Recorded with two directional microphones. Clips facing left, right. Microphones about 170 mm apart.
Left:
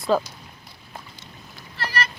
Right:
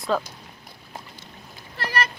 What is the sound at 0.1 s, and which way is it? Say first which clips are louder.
Speech: left 3 dB; 5° left (ahead or behind).